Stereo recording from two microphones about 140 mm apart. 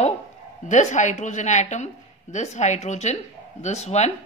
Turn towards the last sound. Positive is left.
turn(degrees=50)  # may be behind; listen again after turning